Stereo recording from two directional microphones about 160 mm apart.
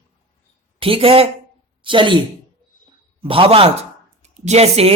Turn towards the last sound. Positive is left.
turn(degrees=-40)  # may be behind; listen again after turning